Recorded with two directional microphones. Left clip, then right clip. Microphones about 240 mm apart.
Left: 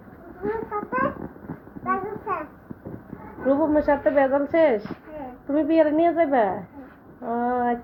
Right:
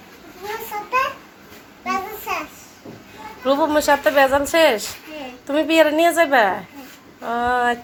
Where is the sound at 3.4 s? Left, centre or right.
Right.